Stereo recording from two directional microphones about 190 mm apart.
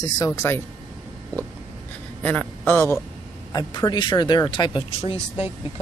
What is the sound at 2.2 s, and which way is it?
A man's voice, 10° left (ahead or behind).